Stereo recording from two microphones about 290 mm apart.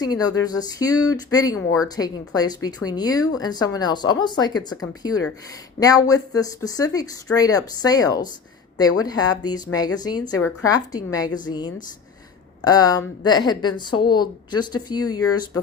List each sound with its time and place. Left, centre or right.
0.0 s speech: centre